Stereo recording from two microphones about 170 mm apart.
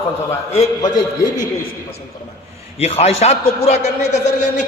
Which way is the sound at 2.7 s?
35° left (ahead or behind).